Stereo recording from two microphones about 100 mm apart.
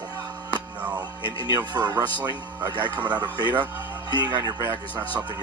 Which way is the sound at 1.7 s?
40° right (ahead or behind).